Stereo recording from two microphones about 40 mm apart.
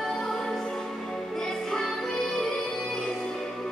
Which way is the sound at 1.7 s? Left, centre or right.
Centre.